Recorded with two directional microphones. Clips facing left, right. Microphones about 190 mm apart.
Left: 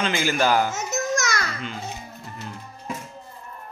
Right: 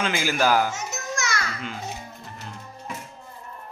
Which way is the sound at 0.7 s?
40° left (ahead or behind).